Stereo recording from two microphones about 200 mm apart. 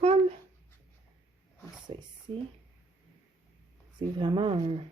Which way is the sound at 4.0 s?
25° right (ahead or behind).